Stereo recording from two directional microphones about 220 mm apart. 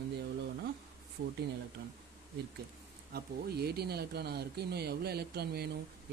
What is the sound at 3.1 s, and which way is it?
Speech, 45° right (ahead or behind).